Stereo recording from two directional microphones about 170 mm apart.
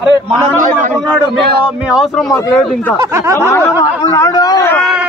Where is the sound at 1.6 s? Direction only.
5° right (ahead or behind).